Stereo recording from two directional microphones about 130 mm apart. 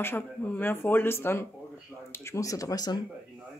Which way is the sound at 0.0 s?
15° left (ahead or behind).